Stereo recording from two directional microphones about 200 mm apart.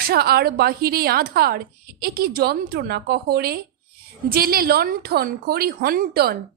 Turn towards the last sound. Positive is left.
turn(degrees=-50)  # may be behind; listen again after turning